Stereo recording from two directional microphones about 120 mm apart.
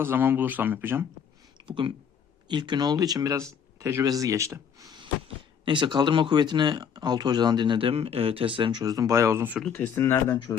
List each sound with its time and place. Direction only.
0.0 s speech: 15° right (ahead or behind)
1.5 s a sound: 40° right (ahead or behind)
2.5 s speech: 40° right (ahead or behind)
5.6 s speech: 40° right (ahead or behind)
8.8 s speech: 30° right (ahead or behind)
9.7 s speech: 20° left (ahead or behind)